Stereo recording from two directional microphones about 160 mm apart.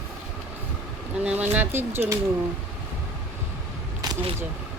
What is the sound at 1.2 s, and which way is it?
Speech, 10° right (ahead or behind).